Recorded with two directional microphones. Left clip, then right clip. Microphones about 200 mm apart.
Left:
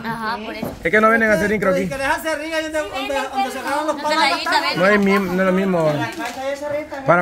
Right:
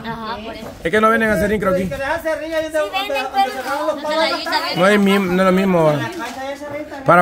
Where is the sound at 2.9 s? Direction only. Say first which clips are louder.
Right 2 dB; 50° right (ahead or behind).